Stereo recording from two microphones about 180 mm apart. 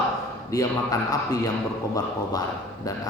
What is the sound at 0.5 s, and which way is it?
Speech, 20° left (ahead or behind).